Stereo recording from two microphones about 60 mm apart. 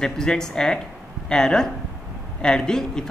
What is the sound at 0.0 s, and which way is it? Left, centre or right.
Speech, centre.